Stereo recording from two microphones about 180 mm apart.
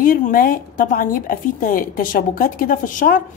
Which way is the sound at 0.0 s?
50° left (ahead or behind).